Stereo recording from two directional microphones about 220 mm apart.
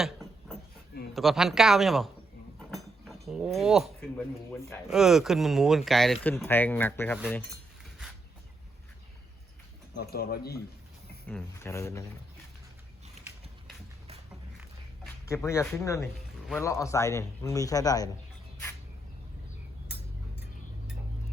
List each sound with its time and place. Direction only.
0.0 s a sound: centre (ahead or behind)
1.1 s speech: centre (ahead or behind)
2.6 s cutlery: centre (ahead or behind)
4.9 s a man's voice: centre (ahead or behind)
9.9 s speech: 45° left (ahead or behind)
11.3 s a man's voice: 10° left (ahead or behind)
15.3 s a man's voice: 15° left (ahead or behind)